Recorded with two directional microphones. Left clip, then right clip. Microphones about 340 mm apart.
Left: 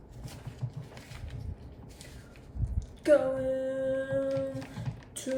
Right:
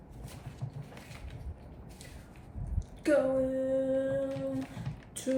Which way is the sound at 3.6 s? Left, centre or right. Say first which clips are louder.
Right 1 dB; centre.